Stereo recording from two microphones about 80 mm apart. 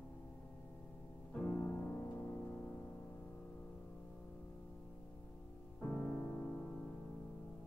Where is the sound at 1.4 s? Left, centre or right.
Centre.